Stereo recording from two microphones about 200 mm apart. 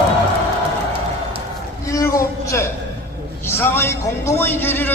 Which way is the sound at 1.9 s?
15° left (ahead or behind).